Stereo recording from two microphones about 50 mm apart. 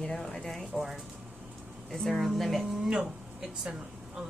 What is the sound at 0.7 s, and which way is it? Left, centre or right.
Speech, centre.